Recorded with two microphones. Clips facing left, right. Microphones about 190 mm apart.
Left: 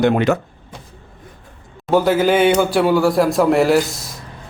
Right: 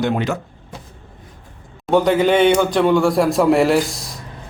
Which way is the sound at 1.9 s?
5° left (ahead or behind).